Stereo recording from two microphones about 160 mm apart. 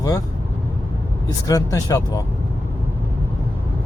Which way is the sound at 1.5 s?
20° left (ahead or behind).